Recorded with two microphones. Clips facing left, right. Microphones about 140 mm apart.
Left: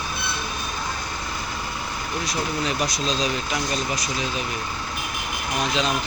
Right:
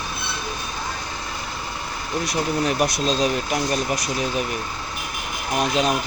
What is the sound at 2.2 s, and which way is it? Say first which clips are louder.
Speech: right 4 dB; 60° right (ahead or behind).